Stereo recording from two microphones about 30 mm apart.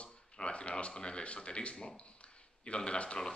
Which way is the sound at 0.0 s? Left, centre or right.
Left.